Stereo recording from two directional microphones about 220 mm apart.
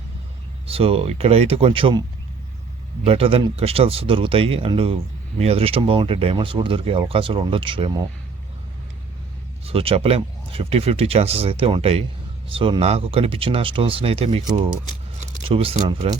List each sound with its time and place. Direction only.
0.7 s speech: 25° right (ahead or behind)
9.6 s speech: 25° right (ahead or behind)